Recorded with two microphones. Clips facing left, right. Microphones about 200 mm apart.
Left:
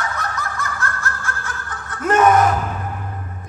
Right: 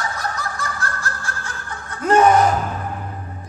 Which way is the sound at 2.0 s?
30° right (ahead or behind).